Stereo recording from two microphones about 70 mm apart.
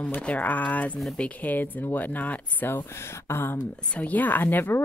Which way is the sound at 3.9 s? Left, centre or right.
Left.